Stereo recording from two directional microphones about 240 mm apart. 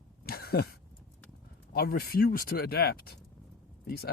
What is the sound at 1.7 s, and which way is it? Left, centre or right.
Speech, left.